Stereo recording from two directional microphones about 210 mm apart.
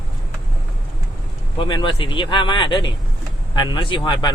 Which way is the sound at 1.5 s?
25° left (ahead or behind).